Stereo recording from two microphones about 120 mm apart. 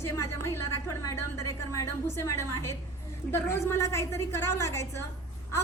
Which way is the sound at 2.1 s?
25° left (ahead or behind).